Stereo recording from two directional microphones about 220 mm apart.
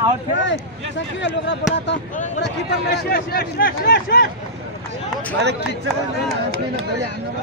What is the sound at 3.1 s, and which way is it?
Speech, 45° left (ahead or behind).